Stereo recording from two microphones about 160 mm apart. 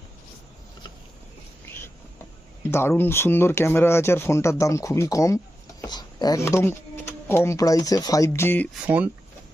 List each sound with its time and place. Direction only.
2.6 s speech: 15° left (ahead or behind)